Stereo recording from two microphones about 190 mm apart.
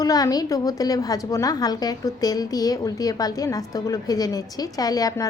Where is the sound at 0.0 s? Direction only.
20° left (ahead or behind).